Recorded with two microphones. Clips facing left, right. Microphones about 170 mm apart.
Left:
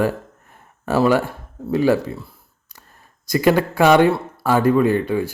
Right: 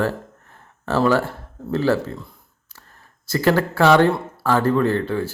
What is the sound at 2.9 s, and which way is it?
Speech, 15° left (ahead or behind).